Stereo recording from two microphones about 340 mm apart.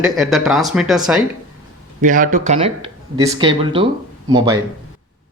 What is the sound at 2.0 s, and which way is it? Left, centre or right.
Speech, right.